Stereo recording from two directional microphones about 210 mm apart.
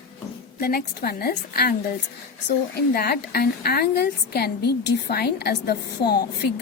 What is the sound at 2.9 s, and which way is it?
A woman's voice, 45° left (ahead or behind).